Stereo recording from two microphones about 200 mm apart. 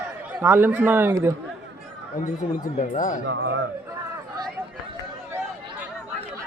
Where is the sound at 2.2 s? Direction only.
40° left (ahead or behind).